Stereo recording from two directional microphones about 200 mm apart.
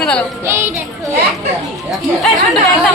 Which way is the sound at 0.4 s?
15° right (ahead or behind).